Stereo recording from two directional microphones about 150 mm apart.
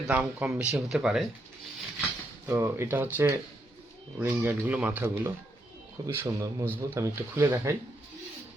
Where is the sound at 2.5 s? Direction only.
15° right (ahead or behind).